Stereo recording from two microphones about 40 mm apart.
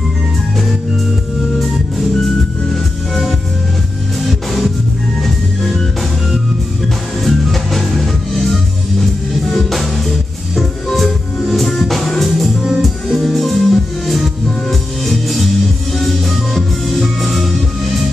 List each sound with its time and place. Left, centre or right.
1.6 s music: centre
7.2 s music: centre